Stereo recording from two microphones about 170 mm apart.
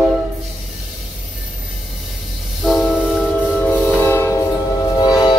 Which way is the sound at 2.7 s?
Centre (ahead or behind).